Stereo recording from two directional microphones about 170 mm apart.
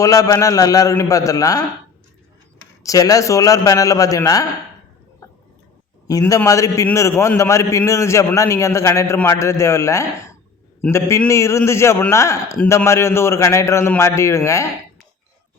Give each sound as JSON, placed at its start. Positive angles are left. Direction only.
{"t": 0.0, "sound": "a man's voice", "side_deg": 20}
{"t": 2.8, "sound": "a man's voice", "side_deg": 20}
{"t": 6.1, "sound": "a man's voice", "side_deg": 20}